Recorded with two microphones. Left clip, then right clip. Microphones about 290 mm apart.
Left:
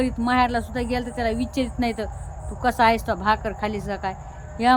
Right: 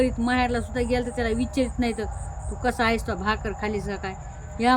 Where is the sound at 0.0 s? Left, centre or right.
Centre.